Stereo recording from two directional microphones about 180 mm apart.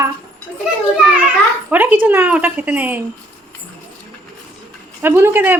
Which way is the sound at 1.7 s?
10° right (ahead or behind).